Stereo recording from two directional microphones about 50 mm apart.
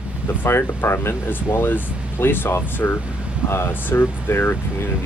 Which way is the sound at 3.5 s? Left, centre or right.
Left.